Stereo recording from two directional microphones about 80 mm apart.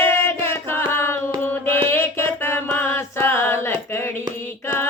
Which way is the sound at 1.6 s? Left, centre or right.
Left.